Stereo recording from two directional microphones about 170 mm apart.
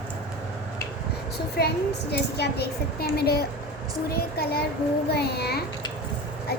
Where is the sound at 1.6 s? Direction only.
70° left (ahead or behind).